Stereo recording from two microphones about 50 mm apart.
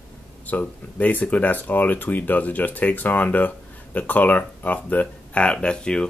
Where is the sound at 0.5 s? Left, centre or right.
Left.